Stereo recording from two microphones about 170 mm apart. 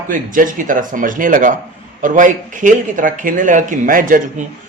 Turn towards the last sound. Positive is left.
turn(degrees=-55)  # may be behind; listen again after turning